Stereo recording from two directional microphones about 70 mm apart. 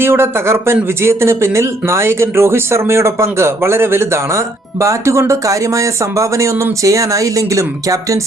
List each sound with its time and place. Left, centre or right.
0.0 s speech: right